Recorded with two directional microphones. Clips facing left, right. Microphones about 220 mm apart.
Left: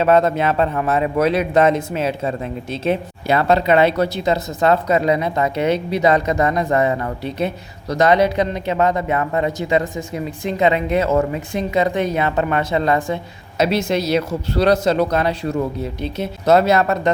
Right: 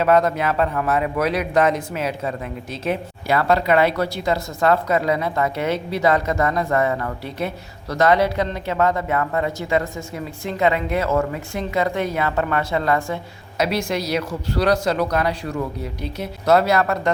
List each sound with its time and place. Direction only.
0.0 s speech: 25° left (ahead or behind)